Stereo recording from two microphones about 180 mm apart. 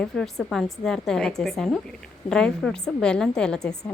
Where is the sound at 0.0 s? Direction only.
Centre (ahead or behind).